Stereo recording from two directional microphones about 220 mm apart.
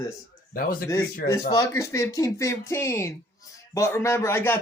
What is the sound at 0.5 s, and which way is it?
Speech, 40° left (ahead or behind).